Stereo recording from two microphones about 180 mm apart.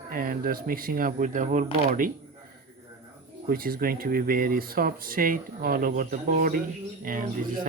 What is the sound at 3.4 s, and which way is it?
Speech, 55° right (ahead or behind).